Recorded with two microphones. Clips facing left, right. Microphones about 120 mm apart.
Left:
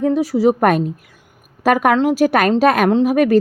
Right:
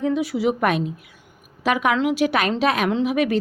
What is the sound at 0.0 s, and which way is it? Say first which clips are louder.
Speech: left 6 dB; 40° left (ahead or behind).